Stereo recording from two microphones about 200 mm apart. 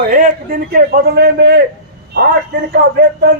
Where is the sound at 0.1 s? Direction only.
45° right (ahead or behind).